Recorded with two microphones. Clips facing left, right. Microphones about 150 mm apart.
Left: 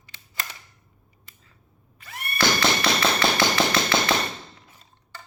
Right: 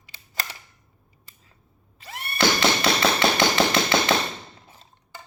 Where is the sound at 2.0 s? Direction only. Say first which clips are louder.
Right 2 dB; 25° right (ahead or behind).